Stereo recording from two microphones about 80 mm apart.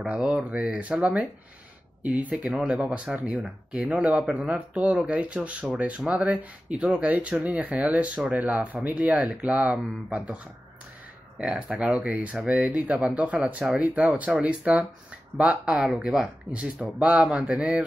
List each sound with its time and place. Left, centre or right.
0.0 s speech: centre
15.9 s speech: centre